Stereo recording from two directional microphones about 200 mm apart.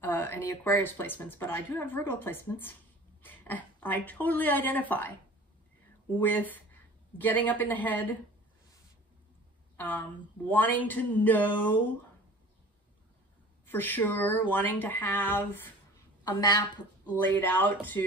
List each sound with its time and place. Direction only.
0.0 s speech: 10° left (ahead or behind)
6.1 s speech: 10° left (ahead or behind)
9.8 s speech: 10° left (ahead or behind)
13.7 s speech: 10° left (ahead or behind)